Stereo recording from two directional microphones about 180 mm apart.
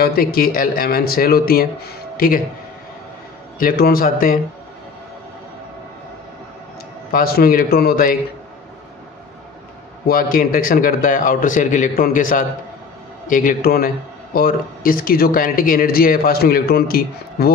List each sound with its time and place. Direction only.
0.0 s a man's voice: 55° left (ahead or behind)
3.5 s a man's voice: 55° left (ahead or behind)
7.1 s a man's voice: 55° left (ahead or behind)
10.0 s a man's voice: 50° left (ahead or behind)